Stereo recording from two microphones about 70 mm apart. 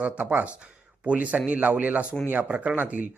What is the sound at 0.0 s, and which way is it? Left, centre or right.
A man's voice, right.